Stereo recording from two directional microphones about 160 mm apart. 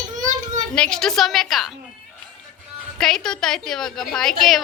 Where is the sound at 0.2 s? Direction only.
50° right (ahead or behind).